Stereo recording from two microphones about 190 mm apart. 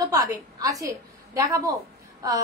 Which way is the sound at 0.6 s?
15° right (ahead or behind).